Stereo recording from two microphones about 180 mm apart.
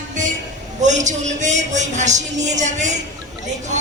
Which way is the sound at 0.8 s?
40° right (ahead or behind).